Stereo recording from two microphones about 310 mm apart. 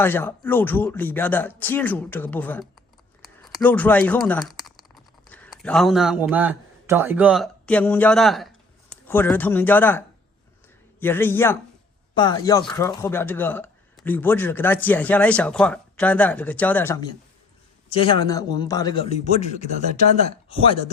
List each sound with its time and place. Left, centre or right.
0.0 s speech: centre
11.0 s a man's voice: centre
20.5 s a man's voice: centre